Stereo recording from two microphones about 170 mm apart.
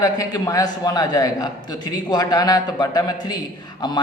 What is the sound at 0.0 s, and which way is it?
A man's voice, 20° left (ahead or behind).